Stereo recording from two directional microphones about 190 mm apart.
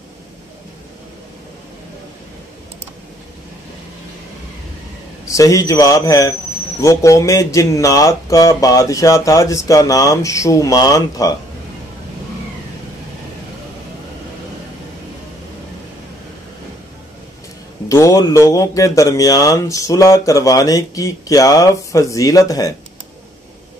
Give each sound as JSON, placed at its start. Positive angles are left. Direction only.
{"t": 5.2, "sound": "speech", "side_deg": 15}
{"t": 17.8, "sound": "speech", "side_deg": 15}